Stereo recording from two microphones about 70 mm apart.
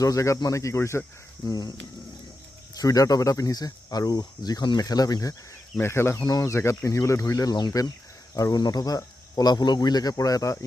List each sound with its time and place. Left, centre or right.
0.0 s speech: left
1.5 s speech: left
2.7 s speech: left
5.8 s speech: left
6.2 s speech: left
6.5 s speech: left